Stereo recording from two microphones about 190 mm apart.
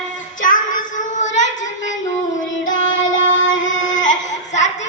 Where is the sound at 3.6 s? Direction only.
90° left.